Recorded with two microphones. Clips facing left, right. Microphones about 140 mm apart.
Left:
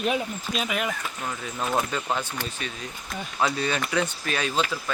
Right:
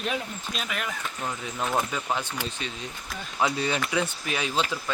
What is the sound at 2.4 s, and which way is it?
A man's voice, 20° right (ahead or behind).